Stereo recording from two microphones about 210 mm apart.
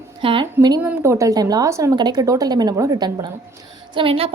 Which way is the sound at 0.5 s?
15° right (ahead or behind).